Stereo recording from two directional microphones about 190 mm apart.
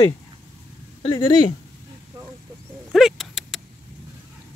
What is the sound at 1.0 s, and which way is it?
Speech, 20° left (ahead or behind).